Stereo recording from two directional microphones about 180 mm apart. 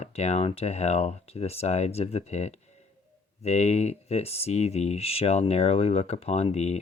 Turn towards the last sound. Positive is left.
turn(degrees=35)  # may be behind; listen again after turning